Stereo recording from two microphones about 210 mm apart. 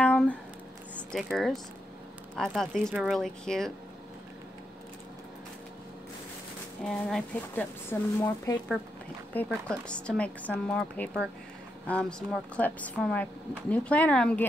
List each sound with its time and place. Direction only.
0.0 s a sound: 5° left (ahead or behind)
1.1 s a woman's voice: centre (ahead or behind)
6.8 s a woman's voice: 5° left (ahead or behind)
9.3 s a woman's voice: 5° left (ahead or behind)